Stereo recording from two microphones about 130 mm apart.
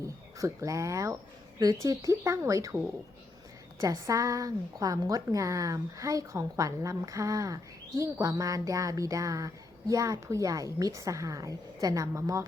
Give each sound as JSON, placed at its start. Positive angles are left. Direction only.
{"t": 0.3, "sound": "a woman's voice", "side_deg": -25}
{"t": 3.8, "sound": "a woman's voice", "side_deg": -30}